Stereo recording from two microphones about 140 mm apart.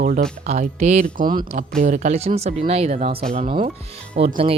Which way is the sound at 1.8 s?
60° right (ahead or behind).